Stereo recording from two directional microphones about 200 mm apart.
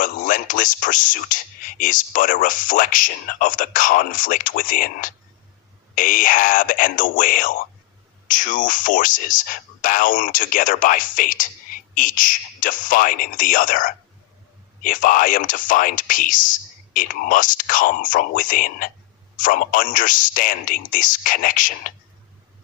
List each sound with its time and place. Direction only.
0.0 s speech: 40° left (ahead or behind)